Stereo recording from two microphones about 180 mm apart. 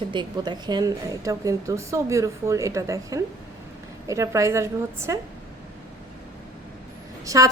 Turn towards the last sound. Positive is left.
turn(degrees=-20)  # may be behind; listen again after turning